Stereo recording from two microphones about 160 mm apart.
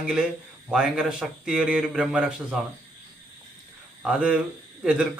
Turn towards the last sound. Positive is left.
turn(degrees=-5)  # may be behind; listen again after turning